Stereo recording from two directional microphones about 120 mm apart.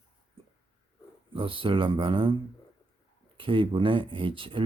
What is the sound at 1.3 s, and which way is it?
Speech, 45° right (ahead or behind).